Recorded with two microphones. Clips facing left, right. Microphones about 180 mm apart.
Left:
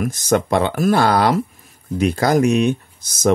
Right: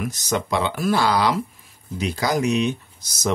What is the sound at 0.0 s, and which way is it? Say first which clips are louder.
Speech: left 7 dB; 50° left (ahead or behind).